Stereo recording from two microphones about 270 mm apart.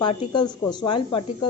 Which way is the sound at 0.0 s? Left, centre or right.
Centre.